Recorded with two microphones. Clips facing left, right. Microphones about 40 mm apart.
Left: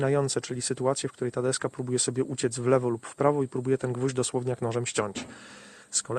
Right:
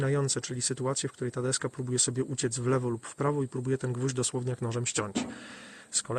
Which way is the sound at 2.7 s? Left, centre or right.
Left.